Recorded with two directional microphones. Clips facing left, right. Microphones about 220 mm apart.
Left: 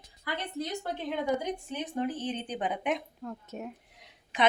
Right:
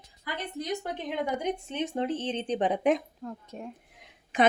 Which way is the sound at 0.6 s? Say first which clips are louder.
Right 3 dB; 15° right (ahead or behind).